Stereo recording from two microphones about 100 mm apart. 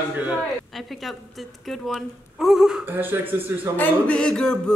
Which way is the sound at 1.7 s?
Centre (ahead or behind).